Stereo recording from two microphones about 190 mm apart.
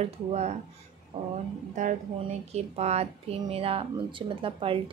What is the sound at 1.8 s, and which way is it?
A woman's voice, 40° right (ahead or behind).